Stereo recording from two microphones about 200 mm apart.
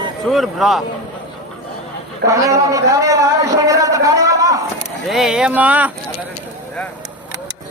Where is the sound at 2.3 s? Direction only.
15° right (ahead or behind).